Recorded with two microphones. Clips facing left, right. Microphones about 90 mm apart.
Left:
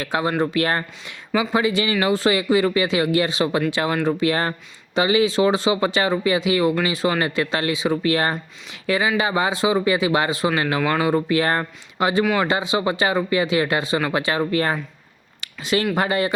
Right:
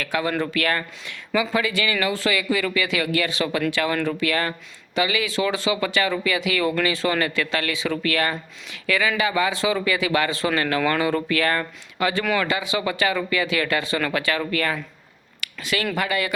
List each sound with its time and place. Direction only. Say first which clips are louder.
0.0 s speech: left 3 dB; 25° left (ahead or behind)
15.4 s a sound: left 5 dB; 25° left (ahead or behind)
16.0 s speech: left 4 dB; 30° left (ahead or behind)